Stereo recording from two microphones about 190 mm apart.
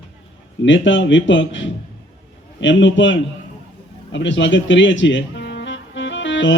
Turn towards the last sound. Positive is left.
turn(degrees=75)  # may be behind; listen again after turning